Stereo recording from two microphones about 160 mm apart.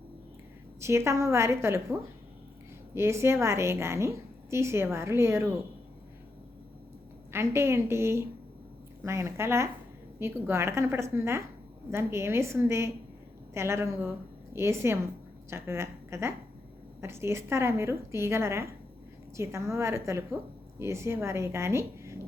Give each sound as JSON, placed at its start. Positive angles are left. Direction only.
{"t": 0.8, "sound": "a woman's voice", "side_deg": -15}
{"t": 7.3, "sound": "a woman's voice", "side_deg": -15}